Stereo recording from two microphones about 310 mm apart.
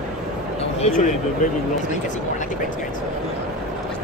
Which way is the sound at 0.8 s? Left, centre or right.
Left.